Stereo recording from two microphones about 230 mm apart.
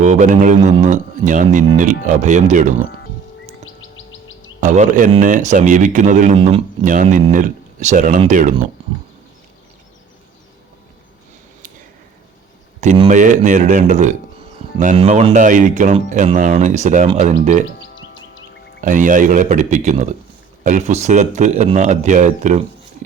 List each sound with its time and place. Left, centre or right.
0.0 s speech: right
3.8 s chirp: left
4.6 s speech: right
12.8 s speech: right
17.7 s a sound: left
18.8 s speech: right